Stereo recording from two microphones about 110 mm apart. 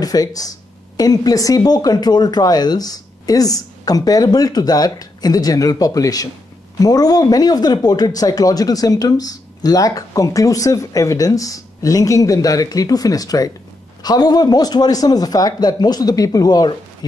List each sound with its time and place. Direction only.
0.0 s speech: 35° left (ahead or behind)